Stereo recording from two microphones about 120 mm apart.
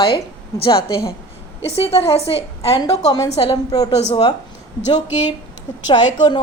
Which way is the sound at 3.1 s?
35° left (ahead or behind).